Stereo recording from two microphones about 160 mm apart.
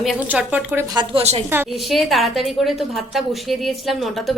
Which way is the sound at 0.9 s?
40° right (ahead or behind).